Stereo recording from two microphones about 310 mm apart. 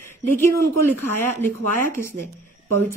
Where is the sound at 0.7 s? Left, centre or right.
Right.